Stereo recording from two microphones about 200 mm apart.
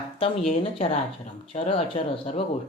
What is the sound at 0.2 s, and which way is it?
A man's voice, 30° left (ahead or behind).